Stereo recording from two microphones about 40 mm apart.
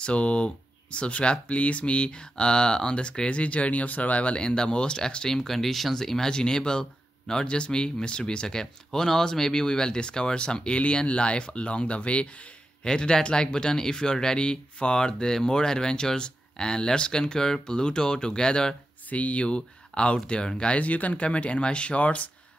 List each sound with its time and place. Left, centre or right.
0.0 s speech: left
4.4 s speech: left
12.8 s speech: centre
19.0 s speech: left
20.7 s speech: left